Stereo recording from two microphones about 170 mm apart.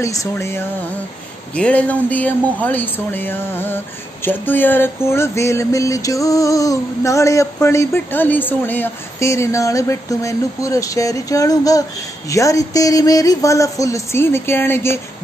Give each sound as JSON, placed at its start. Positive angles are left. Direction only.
{"t": 0.0, "sound": "speech", "side_deg": 20}